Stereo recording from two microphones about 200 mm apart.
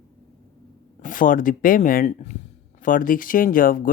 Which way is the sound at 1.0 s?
40° left (ahead or behind).